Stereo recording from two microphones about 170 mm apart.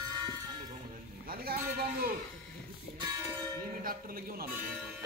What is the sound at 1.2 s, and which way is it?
Sheep, 60° right (ahead or behind).